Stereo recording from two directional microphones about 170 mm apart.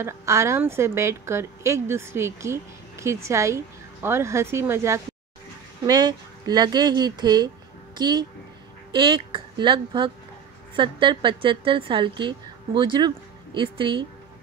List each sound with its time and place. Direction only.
0.0 s a woman's voice: 15° right (ahead or behind)